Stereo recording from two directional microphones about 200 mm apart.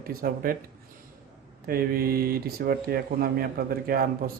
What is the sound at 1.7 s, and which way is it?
A man's voice, 50° right (ahead or behind).